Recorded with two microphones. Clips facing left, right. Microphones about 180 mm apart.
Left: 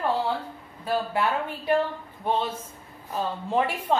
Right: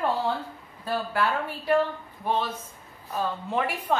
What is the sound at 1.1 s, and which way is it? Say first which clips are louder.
Speech: left 1 dB; 20° left (ahead or behind).